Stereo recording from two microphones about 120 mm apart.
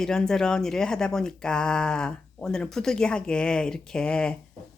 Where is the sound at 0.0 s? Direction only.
5° left (ahead or behind).